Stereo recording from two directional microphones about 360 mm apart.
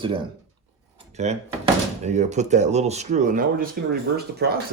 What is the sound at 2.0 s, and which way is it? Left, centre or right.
Speech, centre.